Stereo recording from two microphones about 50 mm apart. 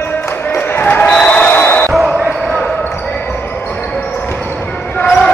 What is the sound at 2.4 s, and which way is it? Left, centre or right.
Basketball bounce, centre.